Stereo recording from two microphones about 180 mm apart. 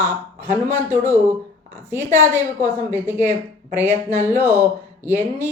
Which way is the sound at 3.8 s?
10° right (ahead or behind).